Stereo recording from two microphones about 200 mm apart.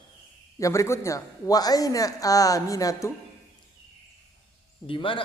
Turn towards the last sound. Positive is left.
turn(degrees=25)  # may be behind; listen again after turning